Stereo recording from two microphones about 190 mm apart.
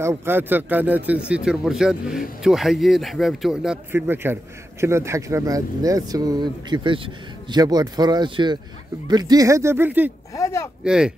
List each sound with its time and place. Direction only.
0.0 s speech: 15° right (ahead or behind)
10.3 s speech: 15° left (ahead or behind)
10.8 s speech: 5° right (ahead or behind)